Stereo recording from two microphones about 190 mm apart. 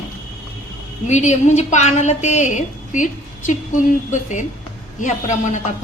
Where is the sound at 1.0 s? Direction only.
40° left (ahead or behind).